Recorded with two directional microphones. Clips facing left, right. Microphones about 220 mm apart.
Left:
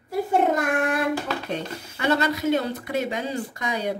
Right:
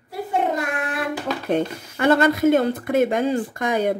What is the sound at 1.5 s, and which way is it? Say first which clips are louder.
Speech: right 8 dB; 50° right (ahead or behind).